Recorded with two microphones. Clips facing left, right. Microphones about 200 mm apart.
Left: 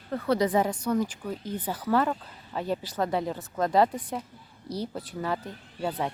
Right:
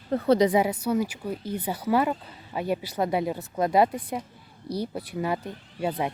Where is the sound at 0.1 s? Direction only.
25° right (ahead or behind).